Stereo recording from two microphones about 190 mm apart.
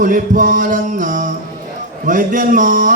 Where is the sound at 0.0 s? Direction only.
45° right (ahead or behind).